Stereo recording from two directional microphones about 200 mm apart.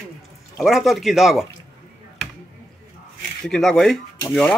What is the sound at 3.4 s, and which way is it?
Speech, 5° left (ahead or behind).